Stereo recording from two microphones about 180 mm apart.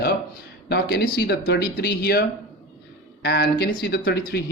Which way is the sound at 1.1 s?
65° left (ahead or behind).